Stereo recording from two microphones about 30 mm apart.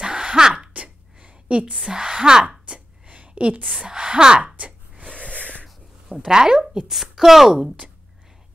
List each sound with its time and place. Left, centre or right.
0.0 s a sound: right
0.7 s a sound: right
1.9 s speech: right
2.7 s chopping: right
3.1 s a sound: right
3.6 s a woman's voice: right
4.6 s wood: right
5.3 s wheeze: left
6.2 s speech: right
6.9 s a woman's voice: centre